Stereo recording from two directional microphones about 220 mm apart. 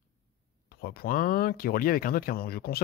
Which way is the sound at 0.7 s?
45° left (ahead or behind).